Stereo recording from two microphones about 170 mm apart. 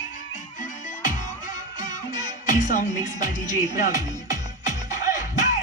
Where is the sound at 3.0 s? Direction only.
45° left (ahead or behind).